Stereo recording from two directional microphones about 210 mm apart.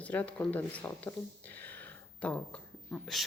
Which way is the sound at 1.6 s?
10° left (ahead or behind).